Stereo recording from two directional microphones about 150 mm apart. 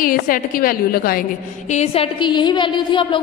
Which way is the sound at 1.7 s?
45° left (ahead or behind).